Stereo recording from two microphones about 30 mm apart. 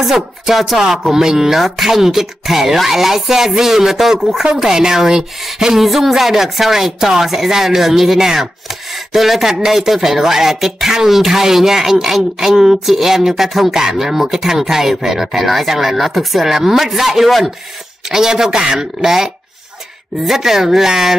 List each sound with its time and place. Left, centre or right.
0.0 s speech: centre
1.6 s speech: centre
5.9 s speech: centre
16.4 s speech: centre